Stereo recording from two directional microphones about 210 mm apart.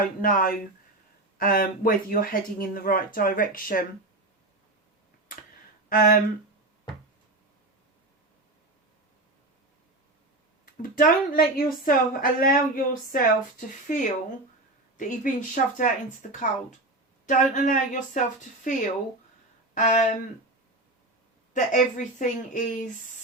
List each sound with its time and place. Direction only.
0.0 s a woman's voice: 40° left (ahead or behind)
5.9 s speech: 45° left (ahead or behind)
10.8 s a woman's voice: 40° left (ahead or behind)
19.7 s a woman's voice: 35° left (ahead or behind)
21.5 s a woman's voice: 35° left (ahead or behind)